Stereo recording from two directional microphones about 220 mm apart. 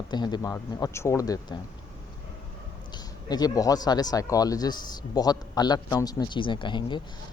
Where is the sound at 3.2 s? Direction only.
20° left (ahead or behind).